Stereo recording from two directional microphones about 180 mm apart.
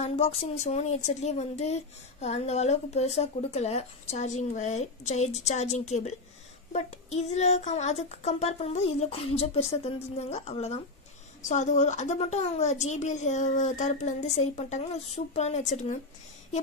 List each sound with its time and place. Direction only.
0.0 s speech: 35° left (ahead or behind)